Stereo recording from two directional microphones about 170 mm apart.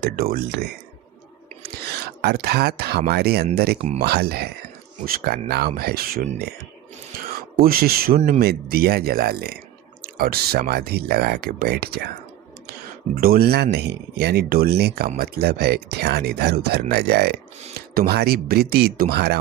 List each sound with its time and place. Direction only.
0.0 s speech: 60° right (ahead or behind)
2.2 s speech: 65° right (ahead or behind)
7.6 s speech: 60° right (ahead or behind)
13.1 s speech: 60° right (ahead or behind)